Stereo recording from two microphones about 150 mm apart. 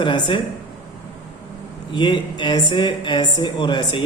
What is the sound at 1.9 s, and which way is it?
A woman's voice, 30° left (ahead or behind).